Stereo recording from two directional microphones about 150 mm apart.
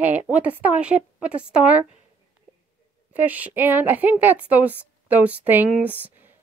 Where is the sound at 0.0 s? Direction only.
10° right (ahead or behind).